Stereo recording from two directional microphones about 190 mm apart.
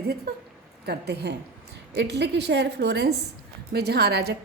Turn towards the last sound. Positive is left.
turn(degrees=-60)  # may be behind; listen again after turning